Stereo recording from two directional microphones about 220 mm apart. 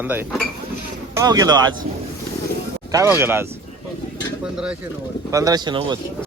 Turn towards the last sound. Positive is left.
turn(degrees=-20)  # may be behind; listen again after turning